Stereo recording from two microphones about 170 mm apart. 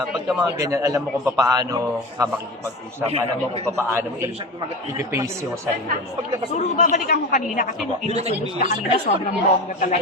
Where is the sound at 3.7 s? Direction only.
15° right (ahead or behind).